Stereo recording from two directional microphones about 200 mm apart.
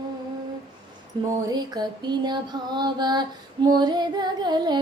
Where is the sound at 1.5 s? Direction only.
20° right (ahead or behind).